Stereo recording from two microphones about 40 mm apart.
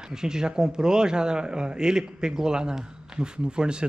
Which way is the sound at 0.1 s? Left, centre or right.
Centre.